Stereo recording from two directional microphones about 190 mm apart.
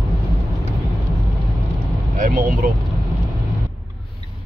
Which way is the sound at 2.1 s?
45° right (ahead or behind).